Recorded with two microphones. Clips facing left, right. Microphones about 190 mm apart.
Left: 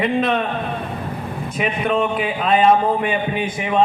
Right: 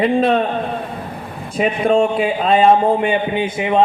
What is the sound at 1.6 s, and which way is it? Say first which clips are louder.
Speech: right 5 dB; 30° right (ahead or behind).